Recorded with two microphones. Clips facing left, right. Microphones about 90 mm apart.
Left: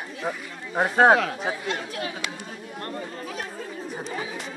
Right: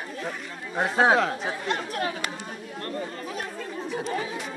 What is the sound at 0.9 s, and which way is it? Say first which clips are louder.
Speech: left 3 dB; 45° left (ahead or behind).